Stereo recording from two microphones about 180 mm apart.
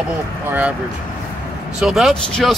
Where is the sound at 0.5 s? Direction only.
10° right (ahead or behind).